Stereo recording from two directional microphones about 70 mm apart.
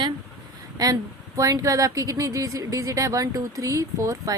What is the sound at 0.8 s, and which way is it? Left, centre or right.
Speech, right.